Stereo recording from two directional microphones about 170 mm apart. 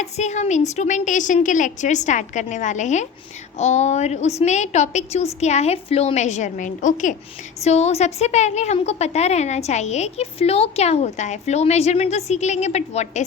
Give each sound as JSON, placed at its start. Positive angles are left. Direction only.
{"t": 0.0, "sound": "a woman's voice", "side_deg": 45}